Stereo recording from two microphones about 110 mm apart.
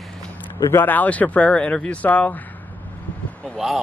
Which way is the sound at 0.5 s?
25° left (ahead or behind).